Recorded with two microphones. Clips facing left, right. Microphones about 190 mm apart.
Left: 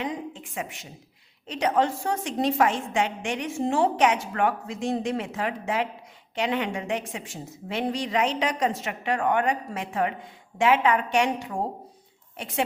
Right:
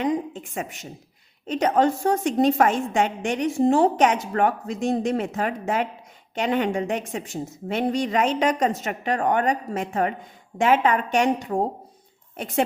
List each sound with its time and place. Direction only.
0.0 s a woman's voice: 45° right (ahead or behind)
12.4 s a woman's voice: 45° right (ahead or behind)